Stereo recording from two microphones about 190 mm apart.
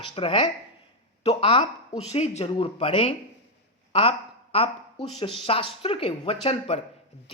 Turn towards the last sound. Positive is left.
turn(degrees=30)  # may be behind; listen again after turning